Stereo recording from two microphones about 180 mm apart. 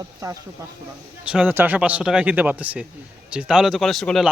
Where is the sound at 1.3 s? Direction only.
10° right (ahead or behind).